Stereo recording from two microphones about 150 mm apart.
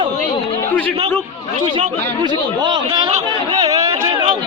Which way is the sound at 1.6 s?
45° right (ahead or behind).